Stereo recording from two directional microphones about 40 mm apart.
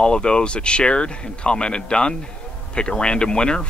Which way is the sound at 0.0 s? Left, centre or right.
Left.